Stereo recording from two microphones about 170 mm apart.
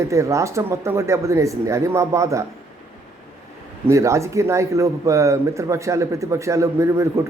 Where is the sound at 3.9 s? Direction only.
15° right (ahead or behind).